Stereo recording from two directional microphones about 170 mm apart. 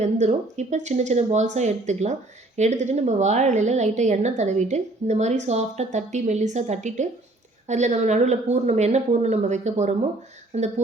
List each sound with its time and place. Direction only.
0.0 s a woman's voice: 40° right (ahead or behind)